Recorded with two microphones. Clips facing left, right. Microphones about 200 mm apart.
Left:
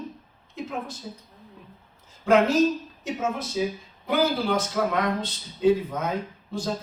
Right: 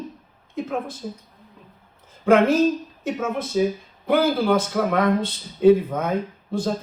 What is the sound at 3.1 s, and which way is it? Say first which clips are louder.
Speech: right 3 dB; 55° right (ahead or behind).